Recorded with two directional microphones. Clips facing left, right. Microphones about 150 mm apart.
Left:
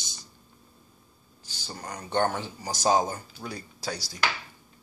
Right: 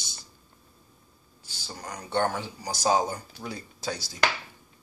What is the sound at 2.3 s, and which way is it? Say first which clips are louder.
Speech: even; 10° right (ahead or behind).